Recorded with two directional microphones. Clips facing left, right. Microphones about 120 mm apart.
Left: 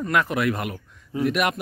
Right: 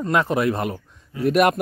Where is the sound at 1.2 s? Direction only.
40° right (ahead or behind).